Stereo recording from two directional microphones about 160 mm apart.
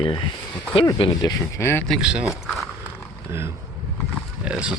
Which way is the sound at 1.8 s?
Centre (ahead or behind).